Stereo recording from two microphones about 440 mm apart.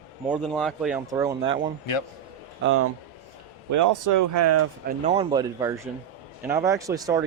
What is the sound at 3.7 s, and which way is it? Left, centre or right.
Speech, right.